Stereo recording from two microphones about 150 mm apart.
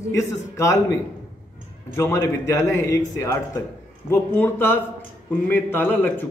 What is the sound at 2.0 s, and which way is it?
A man's voice, 20° left (ahead or behind).